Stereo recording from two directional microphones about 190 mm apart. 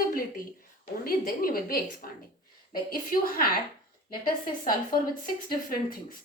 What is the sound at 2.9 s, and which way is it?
Speech, 45° left (ahead or behind).